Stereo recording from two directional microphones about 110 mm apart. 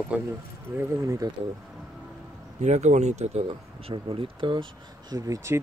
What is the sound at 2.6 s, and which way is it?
Speech, 90° right.